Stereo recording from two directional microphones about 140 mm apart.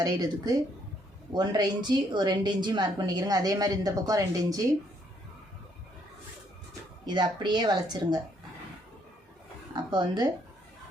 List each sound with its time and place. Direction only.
0.0 s a woman's voice: 25° right (ahead or behind)
7.0 s a woman's voice: 30° right (ahead or behind)
9.7 s speech: 30° right (ahead or behind)